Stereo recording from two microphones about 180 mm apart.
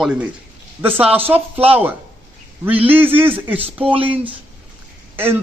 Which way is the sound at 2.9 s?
30° right (ahead or behind).